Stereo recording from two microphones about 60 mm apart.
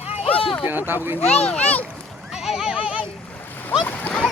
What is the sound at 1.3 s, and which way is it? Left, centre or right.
Speech, left.